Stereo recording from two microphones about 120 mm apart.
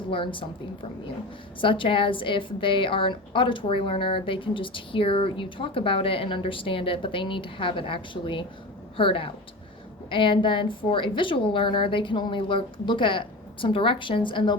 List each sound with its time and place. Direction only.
0.1 s a woman's voice: 45° left (ahead or behind)